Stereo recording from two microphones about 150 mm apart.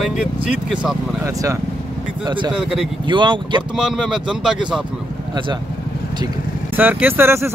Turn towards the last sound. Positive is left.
turn(degrees=-15)  # may be behind; listen again after turning